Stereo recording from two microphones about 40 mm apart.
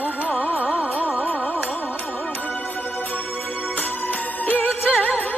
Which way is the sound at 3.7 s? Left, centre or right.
Left.